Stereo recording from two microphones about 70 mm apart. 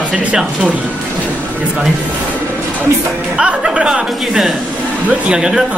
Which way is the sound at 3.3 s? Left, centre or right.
Centre.